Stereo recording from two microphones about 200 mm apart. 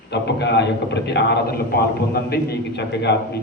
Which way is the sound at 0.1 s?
60° left (ahead or behind).